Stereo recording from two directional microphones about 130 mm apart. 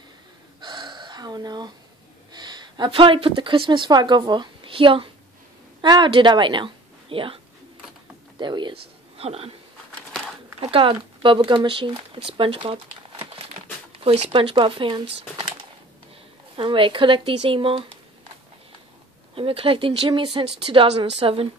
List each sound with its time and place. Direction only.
0.6 s gasp: 35° right (ahead or behind)
2.3 s a woman's voice: 35° right (ahead or behind)
8.4 s speech: 35° right (ahead or behind)
10.6 s speech: 45° right (ahead or behind)
19.3 s a woman's voice: 45° right (ahead or behind)